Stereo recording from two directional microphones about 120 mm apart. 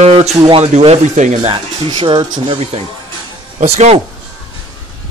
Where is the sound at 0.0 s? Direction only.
60° right (ahead or behind); by 1.5 s 85° right.